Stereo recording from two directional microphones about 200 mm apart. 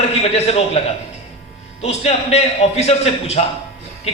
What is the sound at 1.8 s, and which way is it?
A man's voice, 30° left (ahead or behind).